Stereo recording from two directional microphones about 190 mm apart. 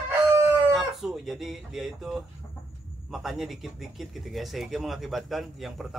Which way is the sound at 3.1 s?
Centre (ahead or behind).